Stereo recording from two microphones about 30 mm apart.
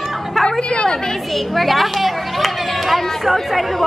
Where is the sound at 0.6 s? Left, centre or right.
Left.